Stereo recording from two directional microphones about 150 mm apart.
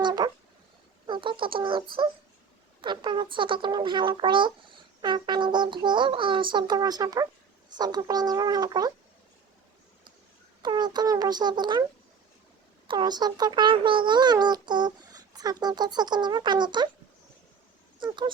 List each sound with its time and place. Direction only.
0.0 s a sound: 30° right (ahead or behind)
1.0 s a child's voice: 30° right (ahead or behind)
10.6 s a child's voice: 30° right (ahead or behind)
12.9 s a child's voice: 30° right (ahead or behind)